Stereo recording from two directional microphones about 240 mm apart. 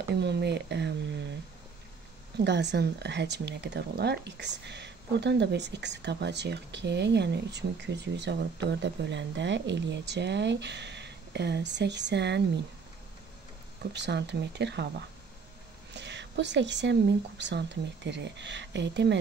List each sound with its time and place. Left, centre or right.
0.1 s speech: right
2.3 s speech: right
13.9 s speech: right